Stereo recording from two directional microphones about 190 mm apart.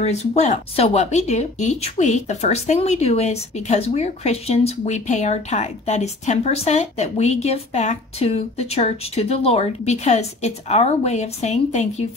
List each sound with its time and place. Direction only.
0.0 s speech: 35° left (ahead or behind)